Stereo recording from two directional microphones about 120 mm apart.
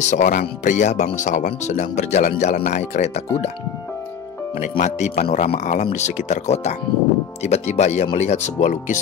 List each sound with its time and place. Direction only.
0.0 s speech: 85° left; by 2.3 s 65° left (ahead or behind)
2.4 s speech: 75° left (ahead or behind)
4.6 s speech: 85° left